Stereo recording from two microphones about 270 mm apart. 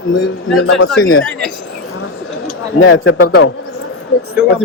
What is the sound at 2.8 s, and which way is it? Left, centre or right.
Speech, left.